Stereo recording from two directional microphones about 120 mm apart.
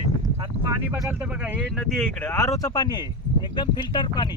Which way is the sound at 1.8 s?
5° left (ahead or behind).